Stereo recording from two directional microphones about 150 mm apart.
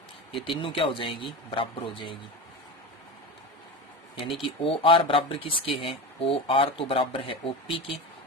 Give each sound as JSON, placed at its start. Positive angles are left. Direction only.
{"t": 0.3, "sound": "speech", "side_deg": 35}
{"t": 4.4, "sound": "speech", "side_deg": 35}